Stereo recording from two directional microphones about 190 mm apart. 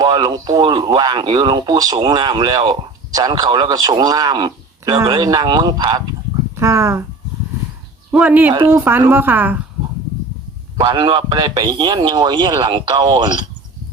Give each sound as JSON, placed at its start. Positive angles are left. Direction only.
{"t": 0.0, "sound": "a woman's voice", "side_deg": -20}
{"t": 8.1, "sound": "a woman's voice", "side_deg": -10}
{"t": 10.8, "sound": "speech", "side_deg": -20}